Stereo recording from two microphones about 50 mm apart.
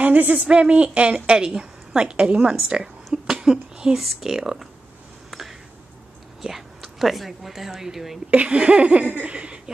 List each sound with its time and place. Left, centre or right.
0.0 s speech: right
0.5 s laughter: right
1.6 s a woman's voice: centre
3.3 s a sound: centre
4.0 s speech: centre
5.3 s a sound: centre
6.4 s speech: centre
8.3 s laughter: right